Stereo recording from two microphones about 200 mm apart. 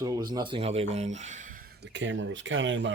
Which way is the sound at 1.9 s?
65° right (ahead or behind).